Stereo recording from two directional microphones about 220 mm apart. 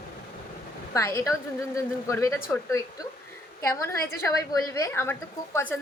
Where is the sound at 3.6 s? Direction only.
15° left (ahead or behind).